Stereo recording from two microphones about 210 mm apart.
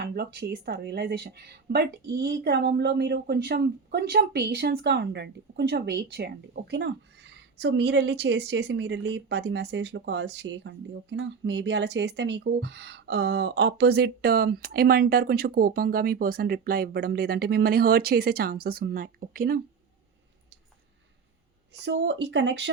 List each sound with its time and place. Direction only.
0.0 s a woman's voice: 50° right (ahead or behind)
21.7 s speech: 55° right (ahead or behind)